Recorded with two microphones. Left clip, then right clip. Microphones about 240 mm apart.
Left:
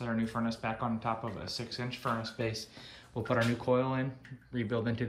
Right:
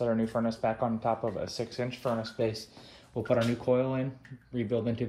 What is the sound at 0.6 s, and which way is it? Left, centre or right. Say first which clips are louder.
Speech: right 7 dB; left.